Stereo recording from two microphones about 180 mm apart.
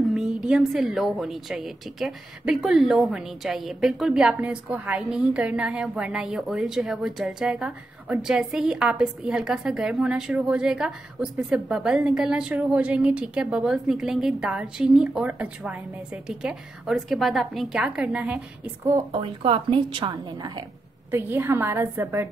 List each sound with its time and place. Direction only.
0.1 s a woman's voice: 5° right (ahead or behind)
19.1 s a woman's voice: 30° right (ahead or behind)
21.1 s a woman's voice: 10° right (ahead or behind)